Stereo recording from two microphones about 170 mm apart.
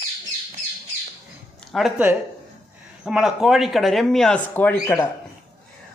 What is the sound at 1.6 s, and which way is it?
Speech, centre (ahead or behind).